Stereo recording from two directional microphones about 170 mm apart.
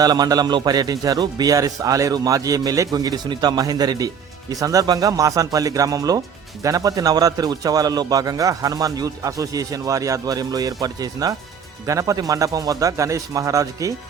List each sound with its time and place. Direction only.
0.0 s speech: 20° right (ahead or behind)